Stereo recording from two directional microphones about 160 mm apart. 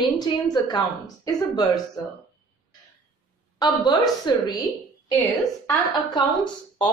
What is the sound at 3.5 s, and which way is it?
Speech, 25° left (ahead or behind).